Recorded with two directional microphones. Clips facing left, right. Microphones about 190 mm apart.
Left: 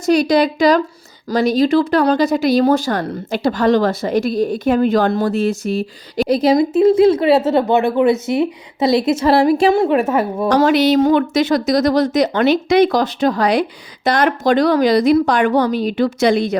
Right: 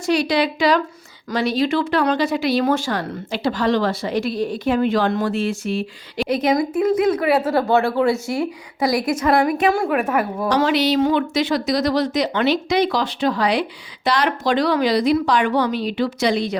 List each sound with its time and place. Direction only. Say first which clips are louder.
0.0 s speech: left 5 dB; 40° left (ahead or behind); by 10.5 s 25° left (ahead or behind)
10.5 s speech: left 5 dB; 45° left (ahead or behind)